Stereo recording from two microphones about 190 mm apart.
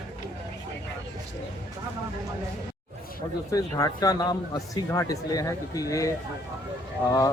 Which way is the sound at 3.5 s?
20° left (ahead or behind).